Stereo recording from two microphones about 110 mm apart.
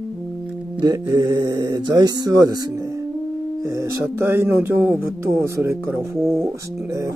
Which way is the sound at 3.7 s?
25° right (ahead or behind).